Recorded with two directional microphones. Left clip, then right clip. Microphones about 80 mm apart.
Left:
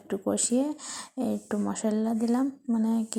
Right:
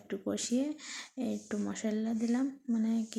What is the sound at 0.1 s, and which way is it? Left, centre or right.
Speech, left.